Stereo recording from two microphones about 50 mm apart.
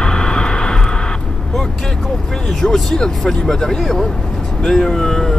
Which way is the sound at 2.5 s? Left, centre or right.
Centre.